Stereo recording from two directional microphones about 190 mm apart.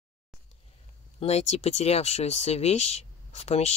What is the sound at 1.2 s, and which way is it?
Speech, 35° left (ahead or behind).